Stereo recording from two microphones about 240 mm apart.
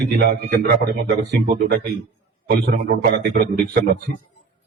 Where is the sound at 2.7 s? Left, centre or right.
Right.